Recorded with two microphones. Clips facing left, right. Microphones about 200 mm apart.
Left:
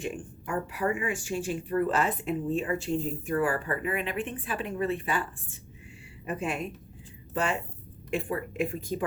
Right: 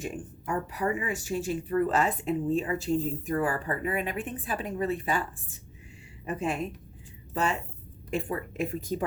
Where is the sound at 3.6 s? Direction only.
40° right (ahead or behind).